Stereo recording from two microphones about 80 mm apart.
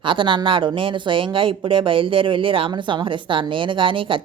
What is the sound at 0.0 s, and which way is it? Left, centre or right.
Speech, right.